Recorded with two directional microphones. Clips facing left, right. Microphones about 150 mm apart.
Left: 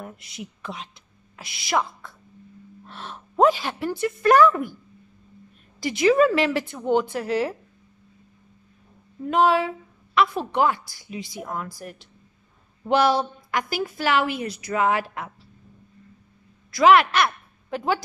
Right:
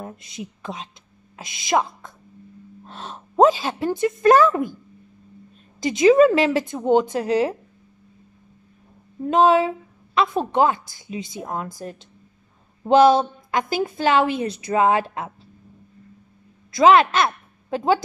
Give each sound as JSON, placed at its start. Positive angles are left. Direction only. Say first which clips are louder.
{"t": 0.0, "sound": "a woman's voice", "louder": "right 3 dB", "side_deg": -20}
{"t": 5.8, "sound": "a woman's voice", "louder": "right 4 dB", "side_deg": -20}
{"t": 9.3, "sound": "a woman's voice", "louder": "right 3 dB", "side_deg": -20}
{"t": 16.7, "sound": "speech", "louder": "right 2 dB", "side_deg": -20}